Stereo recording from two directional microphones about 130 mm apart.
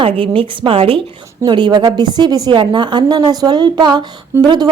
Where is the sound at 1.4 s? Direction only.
35° right (ahead or behind).